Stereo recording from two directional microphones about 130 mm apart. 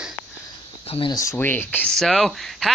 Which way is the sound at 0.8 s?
45° left (ahead or behind).